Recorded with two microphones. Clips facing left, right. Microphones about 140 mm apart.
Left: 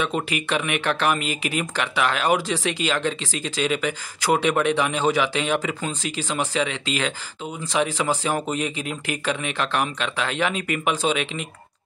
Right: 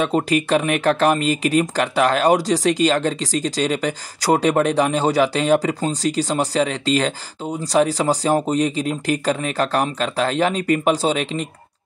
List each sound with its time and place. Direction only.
0.0 s speech: 40° right (ahead or behind)